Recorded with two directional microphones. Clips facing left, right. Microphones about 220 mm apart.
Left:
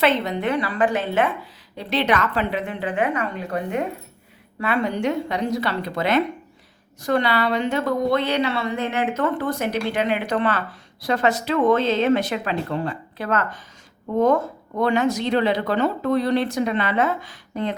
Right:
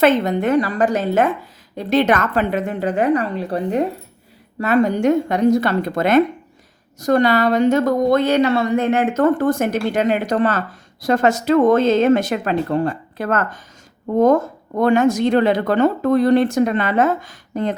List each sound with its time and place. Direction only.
0.0 s speech: 45° right (ahead or behind)